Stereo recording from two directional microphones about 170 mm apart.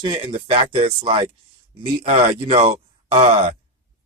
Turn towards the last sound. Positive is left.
turn(degrees=-35)  # may be behind; listen again after turning